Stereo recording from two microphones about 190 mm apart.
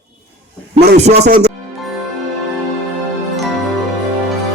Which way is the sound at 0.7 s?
60° right (ahead or behind).